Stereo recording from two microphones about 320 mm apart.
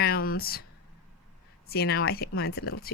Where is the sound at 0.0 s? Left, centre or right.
Left.